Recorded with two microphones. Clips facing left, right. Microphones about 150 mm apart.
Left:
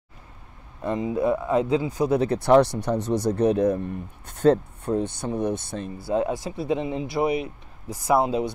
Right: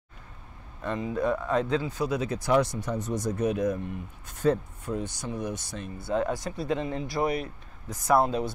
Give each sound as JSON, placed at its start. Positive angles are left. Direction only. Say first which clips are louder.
{"t": 0.8, "sound": "speech", "louder": "left 4 dB", "side_deg": 15}
{"t": 2.2, "sound": "speech", "louder": "left 7 dB", "side_deg": 65}
{"t": 3.4, "sound": "speech", "louder": "left 6 dB", "side_deg": 30}
{"t": 4.3, "sound": "speech", "louder": "left 6 dB", "side_deg": 65}
{"t": 6.1, "sound": "speech", "louder": "left 3 dB", "side_deg": 15}